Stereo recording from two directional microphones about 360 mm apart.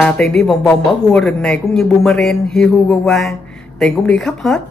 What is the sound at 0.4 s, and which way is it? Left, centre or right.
Speech, centre.